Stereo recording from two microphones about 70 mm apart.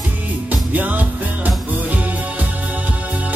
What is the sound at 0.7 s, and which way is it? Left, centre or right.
Music, right.